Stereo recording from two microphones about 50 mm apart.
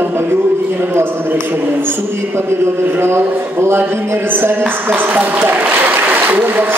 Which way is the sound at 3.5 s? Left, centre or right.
Right.